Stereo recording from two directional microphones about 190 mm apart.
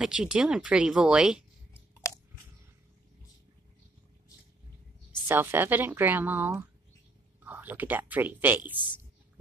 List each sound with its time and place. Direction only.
0.0 s speech: 5° right (ahead or behind)
1.7 s a sound: 15° left (ahead or behind)
5.3 s speech: 10° right (ahead or behind)